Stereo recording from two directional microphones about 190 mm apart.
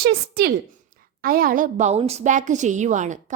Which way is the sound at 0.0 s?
55° right (ahead or behind).